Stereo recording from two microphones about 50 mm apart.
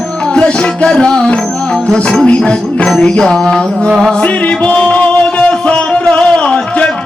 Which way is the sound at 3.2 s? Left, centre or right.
Centre.